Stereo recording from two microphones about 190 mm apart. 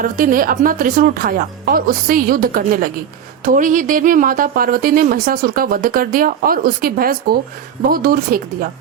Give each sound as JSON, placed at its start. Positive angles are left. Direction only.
{"t": 0.0, "sound": "speech", "side_deg": -45}